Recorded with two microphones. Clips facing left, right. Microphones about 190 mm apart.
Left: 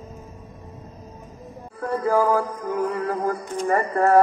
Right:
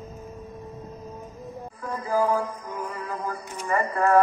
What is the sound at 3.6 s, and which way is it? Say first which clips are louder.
Music: left 3 dB; 45° left (ahead or behind).